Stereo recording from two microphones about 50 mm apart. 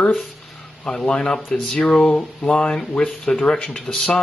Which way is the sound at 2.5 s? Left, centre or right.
Centre.